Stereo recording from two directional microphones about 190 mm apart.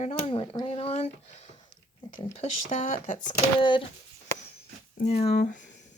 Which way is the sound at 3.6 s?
25° left (ahead or behind).